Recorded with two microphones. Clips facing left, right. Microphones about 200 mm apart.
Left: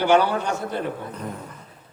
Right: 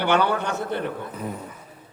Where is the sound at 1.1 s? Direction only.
5° right (ahead or behind).